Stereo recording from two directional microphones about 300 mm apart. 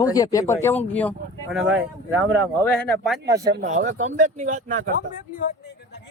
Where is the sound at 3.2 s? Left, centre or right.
Centre.